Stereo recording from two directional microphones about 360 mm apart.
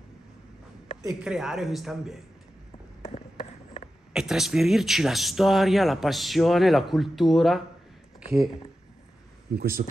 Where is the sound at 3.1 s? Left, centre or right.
Centre.